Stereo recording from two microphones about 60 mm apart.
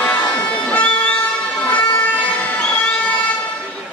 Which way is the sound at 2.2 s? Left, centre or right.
Left.